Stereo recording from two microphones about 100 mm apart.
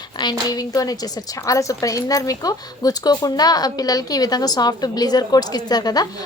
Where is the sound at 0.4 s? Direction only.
40° left (ahead or behind).